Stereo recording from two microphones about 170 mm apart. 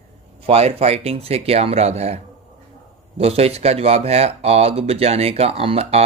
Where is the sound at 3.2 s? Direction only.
35° right (ahead or behind).